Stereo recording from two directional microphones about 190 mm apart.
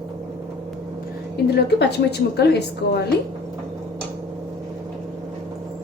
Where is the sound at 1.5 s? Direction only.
60° left (ahead or behind).